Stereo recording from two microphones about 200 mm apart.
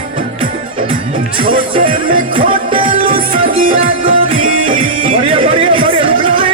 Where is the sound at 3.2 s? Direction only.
45° right (ahead or behind).